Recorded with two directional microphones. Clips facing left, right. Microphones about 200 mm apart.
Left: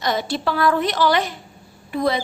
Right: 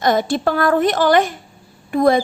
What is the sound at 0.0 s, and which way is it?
A woman's voice, 50° right (ahead or behind).